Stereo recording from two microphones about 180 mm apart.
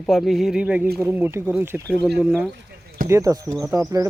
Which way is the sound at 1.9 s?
10° left (ahead or behind).